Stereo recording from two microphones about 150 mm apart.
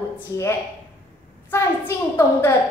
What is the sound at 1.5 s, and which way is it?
A woman's voice, 15° left (ahead or behind).